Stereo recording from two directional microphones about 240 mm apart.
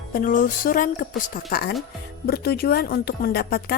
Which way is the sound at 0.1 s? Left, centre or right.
Left.